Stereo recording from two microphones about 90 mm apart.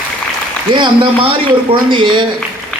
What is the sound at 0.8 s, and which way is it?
A man's voice, 65° right (ahead or behind).